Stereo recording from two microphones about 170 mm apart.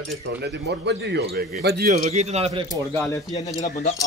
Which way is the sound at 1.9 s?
40° right (ahead or behind).